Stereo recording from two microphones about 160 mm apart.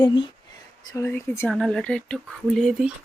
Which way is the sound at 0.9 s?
15° left (ahead or behind).